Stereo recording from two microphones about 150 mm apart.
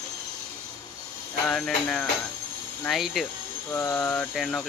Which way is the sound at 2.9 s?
Centre (ahead or behind).